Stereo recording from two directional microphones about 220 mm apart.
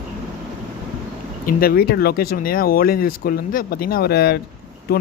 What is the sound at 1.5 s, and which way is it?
Speech, 45° left (ahead or behind).